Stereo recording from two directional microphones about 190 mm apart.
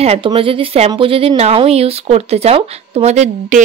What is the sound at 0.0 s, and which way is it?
A woman's voice, 30° right (ahead or behind).